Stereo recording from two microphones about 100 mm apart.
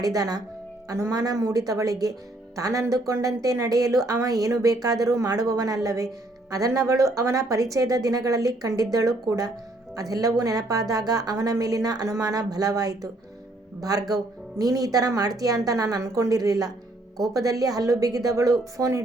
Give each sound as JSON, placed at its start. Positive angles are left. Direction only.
{"t": 0.0, "sound": "a woman's voice", "side_deg": -40}
{"t": 14.6, "sound": "a woman's voice", "side_deg": -35}